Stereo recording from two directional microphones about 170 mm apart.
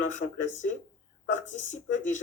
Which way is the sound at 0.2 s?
45° left (ahead or behind).